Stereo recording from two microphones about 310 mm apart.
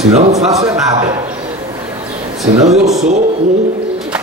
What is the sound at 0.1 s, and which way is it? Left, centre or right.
Speech, centre.